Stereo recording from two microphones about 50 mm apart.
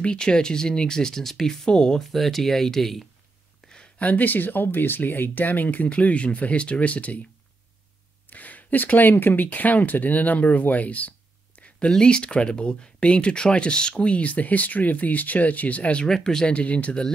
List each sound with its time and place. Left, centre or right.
0.0 s speech: centre
2.0 s speech: centre
3.6 s a sound: centre
4.0 s speech: left
8.3 s speech: left
11.9 s speech: centre
16.1 s speech: centre
16.4 s speech: left